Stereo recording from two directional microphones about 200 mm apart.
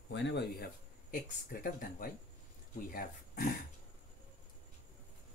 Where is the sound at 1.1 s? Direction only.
45° left (ahead or behind).